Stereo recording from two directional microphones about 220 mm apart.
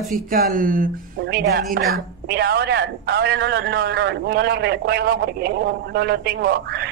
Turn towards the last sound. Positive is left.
turn(degrees=-45)  # may be behind; listen again after turning